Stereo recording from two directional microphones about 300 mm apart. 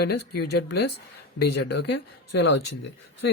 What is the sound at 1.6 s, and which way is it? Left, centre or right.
Speech, left.